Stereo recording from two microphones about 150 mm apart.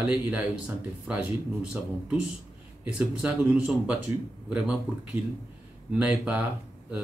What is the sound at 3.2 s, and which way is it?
Speech, 5° right (ahead or behind).